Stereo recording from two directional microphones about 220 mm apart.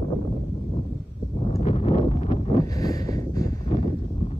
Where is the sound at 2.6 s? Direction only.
15° left (ahead or behind).